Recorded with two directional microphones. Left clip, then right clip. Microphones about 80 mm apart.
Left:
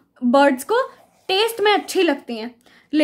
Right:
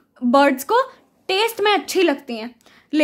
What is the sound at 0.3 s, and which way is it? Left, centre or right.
Speech, right.